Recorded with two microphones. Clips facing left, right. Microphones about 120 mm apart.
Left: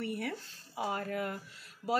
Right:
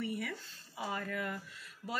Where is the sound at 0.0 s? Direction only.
55° left (ahead or behind).